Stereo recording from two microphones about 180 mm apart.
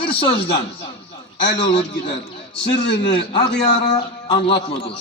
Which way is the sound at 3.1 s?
25° left (ahead or behind).